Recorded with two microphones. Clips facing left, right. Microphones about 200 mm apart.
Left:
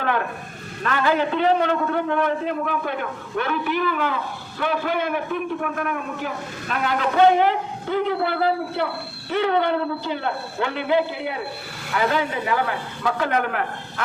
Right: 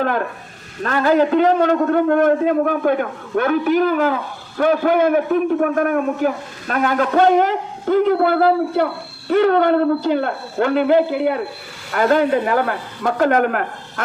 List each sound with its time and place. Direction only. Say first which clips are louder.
0.8 s a man's voice: right 6 dB; 40° right (ahead or behind)